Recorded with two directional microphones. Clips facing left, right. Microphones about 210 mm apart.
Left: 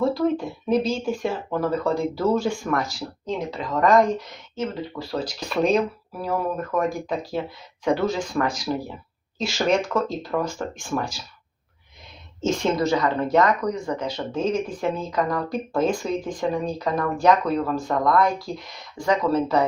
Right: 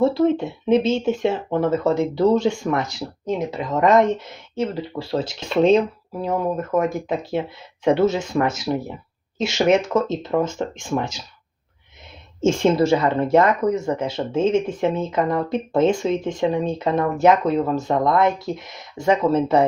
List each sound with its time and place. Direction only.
0.0 s speech: 25° right (ahead or behind)
12.4 s speech: 25° right (ahead or behind)
18.5 s speech: centre (ahead or behind)
18.9 s speech: 25° right (ahead or behind)